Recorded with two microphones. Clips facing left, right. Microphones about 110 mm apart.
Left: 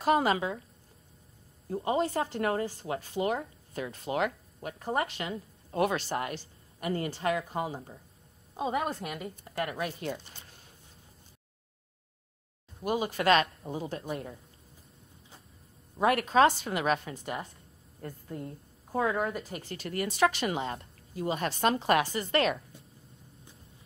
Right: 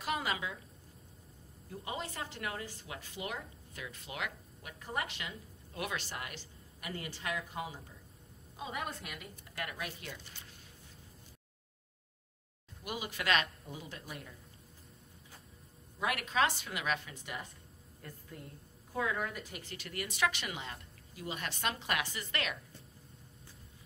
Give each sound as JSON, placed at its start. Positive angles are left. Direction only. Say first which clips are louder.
{"t": 0.0, "sound": "a woman's voice", "louder": "left 10 dB", "side_deg": 40}
{"t": 1.7, "sound": "a woman's voice", "louder": "left 13 dB", "side_deg": 40}
{"t": 12.8, "sound": "a woman's voice", "louder": "left 10 dB", "side_deg": 40}
{"t": 16.0, "sound": "a woman's voice", "louder": "left 9 dB", "side_deg": 40}